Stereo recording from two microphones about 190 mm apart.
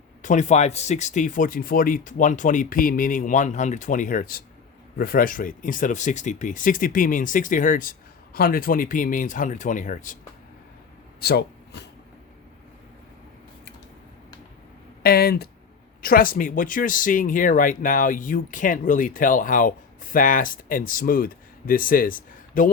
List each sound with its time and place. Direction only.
0.2 s speech: 40° left (ahead or behind)
11.2 s a sound: 55° left (ahead or behind)
15.0 s speech: 55° left (ahead or behind)